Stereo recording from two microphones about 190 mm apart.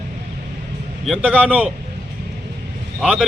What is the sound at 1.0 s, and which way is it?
Speech, 5° right (ahead or behind).